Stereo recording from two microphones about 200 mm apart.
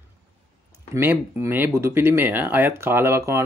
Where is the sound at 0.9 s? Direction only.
10° right (ahead or behind).